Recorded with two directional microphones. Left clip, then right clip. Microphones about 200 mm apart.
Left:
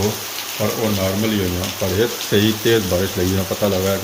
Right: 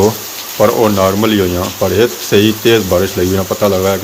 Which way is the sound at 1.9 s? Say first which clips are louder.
Right 7 dB; 5° right (ahead or behind).